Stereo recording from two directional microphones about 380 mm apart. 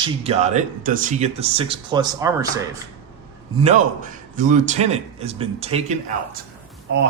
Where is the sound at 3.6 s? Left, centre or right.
Centre.